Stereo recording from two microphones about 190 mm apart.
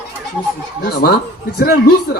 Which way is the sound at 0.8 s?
50° left (ahead or behind).